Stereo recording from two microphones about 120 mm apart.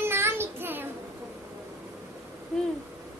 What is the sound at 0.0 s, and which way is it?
Child singing, 20° right (ahead or behind).